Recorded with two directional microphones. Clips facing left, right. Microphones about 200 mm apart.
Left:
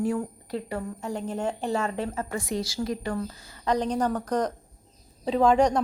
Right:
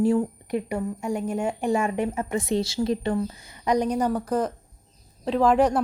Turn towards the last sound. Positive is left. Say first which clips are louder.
# right 1 dB
turn(degrees=-5)  # may be behind; listen again after turning